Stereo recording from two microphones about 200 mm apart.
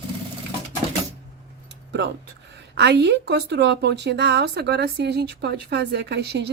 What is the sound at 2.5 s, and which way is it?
Speech, 60° right (ahead or behind).